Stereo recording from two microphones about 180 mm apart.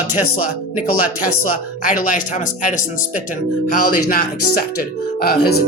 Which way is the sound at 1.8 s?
50° left (ahead or behind).